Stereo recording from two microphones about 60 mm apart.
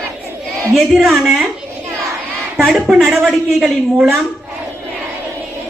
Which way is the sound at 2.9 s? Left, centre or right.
Centre.